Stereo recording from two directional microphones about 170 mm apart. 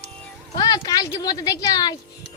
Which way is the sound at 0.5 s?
25° left (ahead or behind).